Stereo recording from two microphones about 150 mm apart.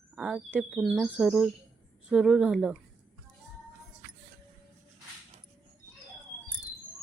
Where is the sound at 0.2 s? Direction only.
5° right (ahead or behind).